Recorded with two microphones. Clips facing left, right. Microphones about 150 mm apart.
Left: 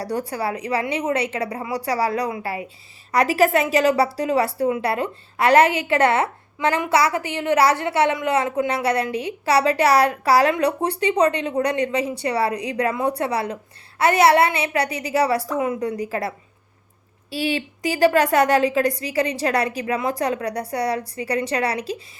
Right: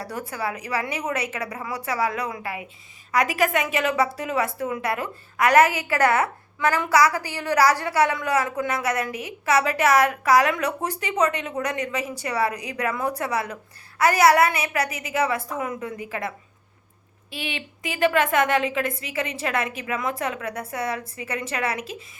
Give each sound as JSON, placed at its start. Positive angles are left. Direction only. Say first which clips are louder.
{"t": 0.0, "sound": "a woman's voice", "louder": "left 5 dB", "side_deg": 35}
{"t": 17.3, "sound": "a woman's voice", "louder": "left 9 dB", "side_deg": 35}